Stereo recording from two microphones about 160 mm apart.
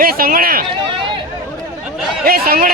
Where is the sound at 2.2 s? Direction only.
65° right (ahead or behind).